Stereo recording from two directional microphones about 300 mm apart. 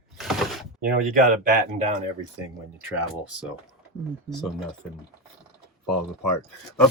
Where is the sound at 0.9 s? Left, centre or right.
Right.